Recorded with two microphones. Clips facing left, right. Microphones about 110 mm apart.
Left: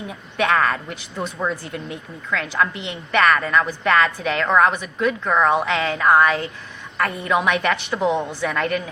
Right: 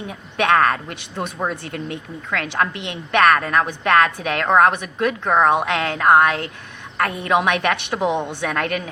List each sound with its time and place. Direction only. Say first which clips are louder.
0.3 s a woman's voice: right 2 dB; 60° right (ahead or behind)
4.6 s a woman's voice: right 1 dB; 70° right (ahead or behind)
5.6 s a woman's voice: right 1 dB; 55° right (ahead or behind)
6.9 s a woman's voice: right 2 dB; 65° right (ahead or behind)
7.9 s a woman's voice: left 1 dB; 20° right (ahead or behind)
8.3 s a woman's voice: even; 60° right (ahead or behind)